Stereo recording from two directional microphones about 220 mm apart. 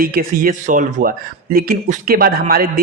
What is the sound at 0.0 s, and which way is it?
Speech, 40° right (ahead or behind).